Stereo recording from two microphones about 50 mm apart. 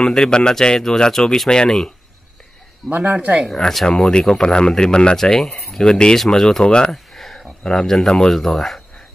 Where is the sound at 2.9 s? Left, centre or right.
Right.